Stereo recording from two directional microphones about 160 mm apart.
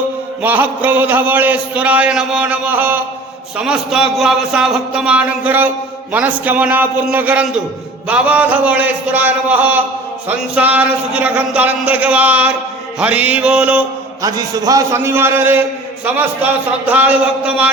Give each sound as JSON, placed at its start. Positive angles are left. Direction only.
{"t": 0.4, "sound": "a man's voice", "side_deg": -10}
{"t": 14.2, "sound": "a man's voice", "side_deg": -25}